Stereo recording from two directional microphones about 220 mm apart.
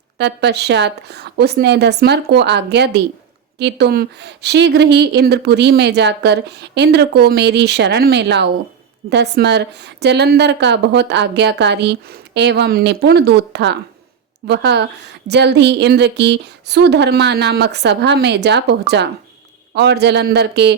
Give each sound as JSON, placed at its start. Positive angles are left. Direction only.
{"t": 0.2, "sound": "speech", "side_deg": -50}